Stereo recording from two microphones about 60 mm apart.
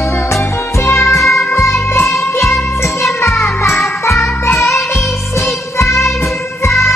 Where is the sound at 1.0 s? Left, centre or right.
Centre.